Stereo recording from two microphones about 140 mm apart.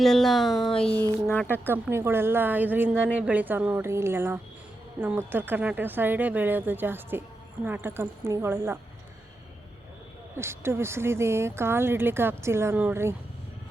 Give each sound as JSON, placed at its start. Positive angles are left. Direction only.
{"t": 0.0, "sound": "speech", "side_deg": 0}
{"t": 0.7, "sound": "a sound", "side_deg": 40}
{"t": 1.3, "sound": "speech", "side_deg": 15}
{"t": 1.6, "sound": "speech", "side_deg": -15}
{"t": 10.3, "sound": "speech", "side_deg": -20}